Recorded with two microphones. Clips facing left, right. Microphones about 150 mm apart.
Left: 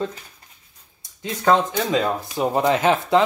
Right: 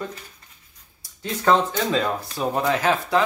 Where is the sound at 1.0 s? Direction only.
20° left (ahead or behind).